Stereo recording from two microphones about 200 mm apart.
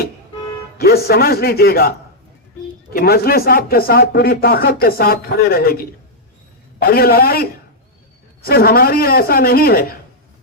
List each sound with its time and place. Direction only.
0.8 s speech: 50° left (ahead or behind)
2.9 s speech: 50° left (ahead or behind)